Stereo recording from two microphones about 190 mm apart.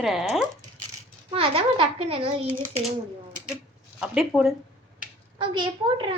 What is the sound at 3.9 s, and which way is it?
Speech, centre (ahead or behind).